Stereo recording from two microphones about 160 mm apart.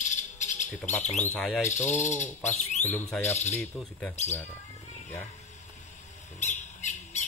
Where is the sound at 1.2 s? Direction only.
5° left (ahead or behind).